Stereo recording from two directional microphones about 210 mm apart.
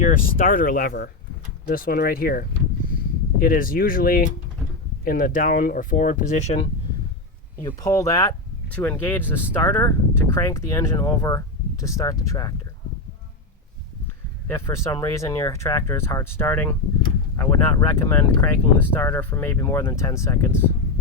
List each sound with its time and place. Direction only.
0.0 s speech: 40° left (ahead or behind)
7.7 s speech: 15° left (ahead or behind)
14.4 s speech: 10° left (ahead or behind)